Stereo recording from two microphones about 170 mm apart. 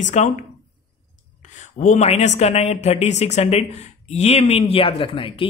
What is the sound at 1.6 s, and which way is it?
Speech, 45° left (ahead or behind).